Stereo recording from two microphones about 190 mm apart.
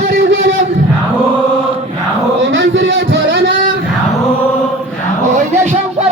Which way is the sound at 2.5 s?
85° right.